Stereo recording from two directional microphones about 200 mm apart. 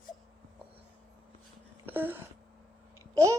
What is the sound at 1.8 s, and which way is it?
Wail, 10° right (ahead or behind).